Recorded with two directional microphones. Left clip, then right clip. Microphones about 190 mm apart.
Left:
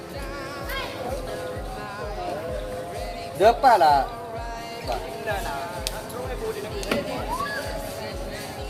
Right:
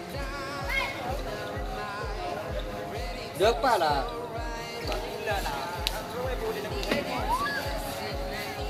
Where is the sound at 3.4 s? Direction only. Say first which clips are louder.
Left 7 dB; 35° left (ahead or behind).